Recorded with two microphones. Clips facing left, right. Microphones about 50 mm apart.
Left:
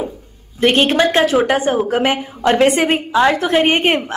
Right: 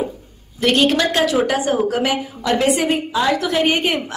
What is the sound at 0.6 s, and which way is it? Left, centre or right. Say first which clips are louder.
A woman's voice: left 2 dB; left.